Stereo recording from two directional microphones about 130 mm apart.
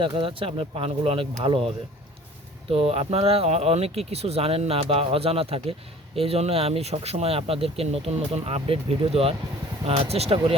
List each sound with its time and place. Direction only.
0.0 s speech: 40° right (ahead or behind)